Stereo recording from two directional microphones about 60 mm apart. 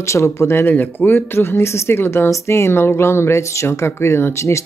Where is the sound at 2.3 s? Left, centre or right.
Left.